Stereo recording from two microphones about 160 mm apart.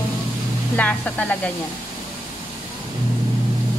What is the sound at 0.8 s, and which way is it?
Speech, 10° left (ahead or behind).